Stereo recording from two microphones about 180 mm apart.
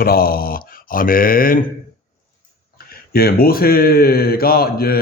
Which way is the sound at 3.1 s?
55° left (ahead or behind).